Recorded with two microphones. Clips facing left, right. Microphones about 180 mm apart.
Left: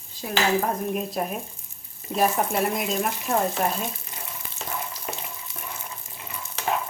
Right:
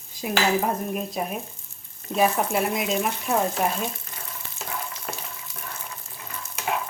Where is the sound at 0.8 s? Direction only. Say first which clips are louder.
Left 1 dB; centre (ahead or behind).